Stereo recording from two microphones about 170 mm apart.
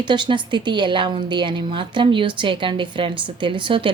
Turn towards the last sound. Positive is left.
turn(degrees=-30)  # may be behind; listen again after turning